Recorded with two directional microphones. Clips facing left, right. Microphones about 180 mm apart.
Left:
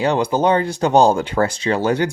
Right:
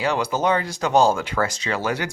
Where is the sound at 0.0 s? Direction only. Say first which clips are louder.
Left 5 dB; 30° left (ahead or behind).